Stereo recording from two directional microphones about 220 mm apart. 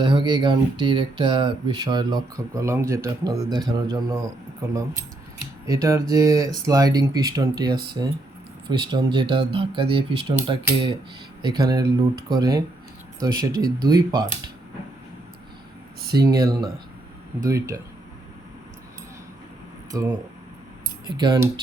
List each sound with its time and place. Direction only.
0.0 s speech: 20° right (ahead or behind)
13.1 s speech: 20° right (ahead or behind)
16.2 s speech: 15° right (ahead or behind)
19.9 s speech: 15° right (ahead or behind)